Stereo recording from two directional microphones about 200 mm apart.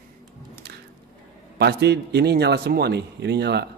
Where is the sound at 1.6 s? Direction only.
55° right (ahead or behind).